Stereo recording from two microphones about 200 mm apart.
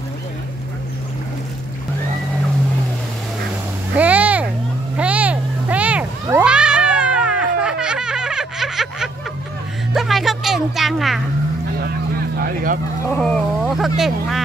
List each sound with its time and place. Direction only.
3.9 s a sound: 10° right (ahead or behind)
6.4 s cat: 5° right (ahead or behind)
9.9 s music: centre (ahead or behind)
12.4 s vehicle: 50° right (ahead or behind)
13.2 s dog: centre (ahead or behind)